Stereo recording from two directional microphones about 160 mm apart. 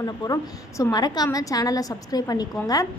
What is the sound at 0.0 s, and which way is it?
A woman's voice, 20° left (ahead or behind).